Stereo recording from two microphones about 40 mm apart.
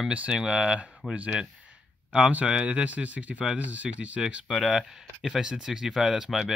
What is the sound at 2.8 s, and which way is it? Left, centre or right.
Speech, right.